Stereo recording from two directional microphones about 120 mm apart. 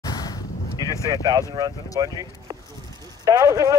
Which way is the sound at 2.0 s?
30° right (ahead or behind).